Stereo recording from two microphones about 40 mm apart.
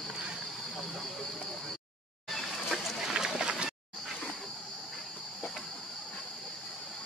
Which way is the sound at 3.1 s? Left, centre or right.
Centre.